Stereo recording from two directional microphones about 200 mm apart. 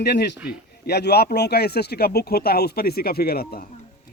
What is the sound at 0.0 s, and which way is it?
A man's voice, 55° left (ahead or behind).